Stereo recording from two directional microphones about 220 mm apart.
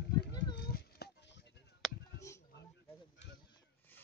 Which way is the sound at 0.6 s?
45° left (ahead or behind).